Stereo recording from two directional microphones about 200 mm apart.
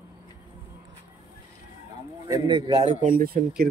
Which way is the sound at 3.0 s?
45° right (ahead or behind).